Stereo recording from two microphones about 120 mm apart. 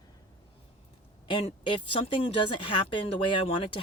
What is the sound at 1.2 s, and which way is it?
Speech, 45° left (ahead or behind).